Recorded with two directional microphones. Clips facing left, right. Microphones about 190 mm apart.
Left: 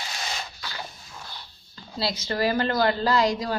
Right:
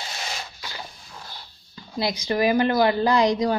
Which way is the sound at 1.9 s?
15° right (ahead or behind).